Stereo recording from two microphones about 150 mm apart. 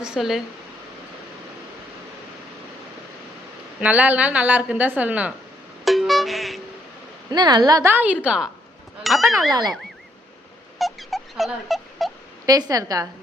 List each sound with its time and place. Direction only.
0.0 s speech: 5° right (ahead or behind)
3.8 s a woman's voice: 10° right (ahead or behind)
5.8 s music: centre (ahead or behind)
7.3 s a woman's voice: 30° right (ahead or behind); by 9.5 s centre (ahead or behind)
9.5 s a woman's voice: 30° right (ahead or behind)
10.8 s a sound: centre (ahead or behind)
12.5 s a woman's voice: 25° right (ahead or behind)